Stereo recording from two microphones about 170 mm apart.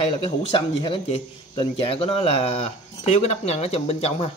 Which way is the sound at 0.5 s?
30° left (ahead or behind).